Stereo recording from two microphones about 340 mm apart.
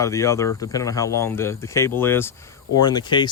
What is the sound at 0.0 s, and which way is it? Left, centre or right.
Speech, centre.